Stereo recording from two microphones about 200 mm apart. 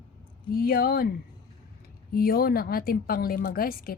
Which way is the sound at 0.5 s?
50° left (ahead or behind).